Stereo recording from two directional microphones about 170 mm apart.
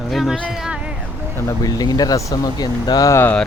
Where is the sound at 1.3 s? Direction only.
20° left (ahead or behind).